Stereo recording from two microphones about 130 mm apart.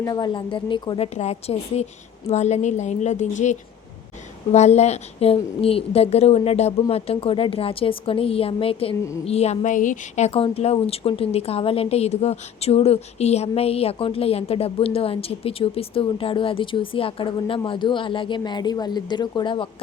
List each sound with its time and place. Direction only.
0.0 s a woman's voice: 30° left (ahead or behind)